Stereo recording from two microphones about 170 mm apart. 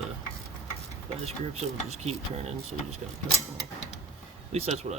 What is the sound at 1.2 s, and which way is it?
Speech, 40° right (ahead or behind).